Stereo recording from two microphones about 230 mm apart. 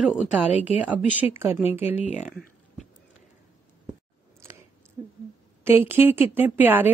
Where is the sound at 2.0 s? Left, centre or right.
Left.